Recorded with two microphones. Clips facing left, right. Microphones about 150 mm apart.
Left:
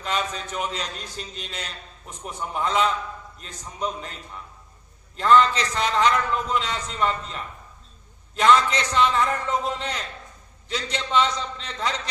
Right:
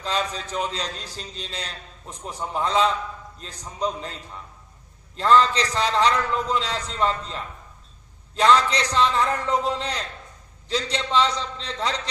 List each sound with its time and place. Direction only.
0.0 s a man's voice: 30° right (ahead or behind)
5.1 s a man's voice: 30° right (ahead or behind)